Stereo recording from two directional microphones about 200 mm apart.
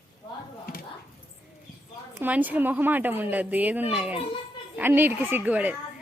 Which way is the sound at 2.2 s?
10° right (ahead or behind).